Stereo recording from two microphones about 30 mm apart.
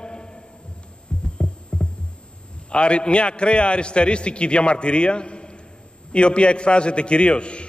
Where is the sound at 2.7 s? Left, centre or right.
Left.